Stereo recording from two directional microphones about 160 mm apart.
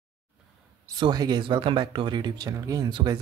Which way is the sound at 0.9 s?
25° right (ahead or behind).